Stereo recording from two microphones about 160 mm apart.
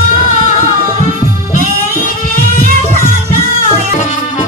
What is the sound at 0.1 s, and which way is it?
Music, 55° left (ahead or behind).